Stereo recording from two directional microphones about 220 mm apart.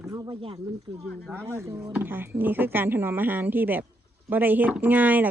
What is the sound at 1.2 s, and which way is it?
Speech, 10° right (ahead or behind).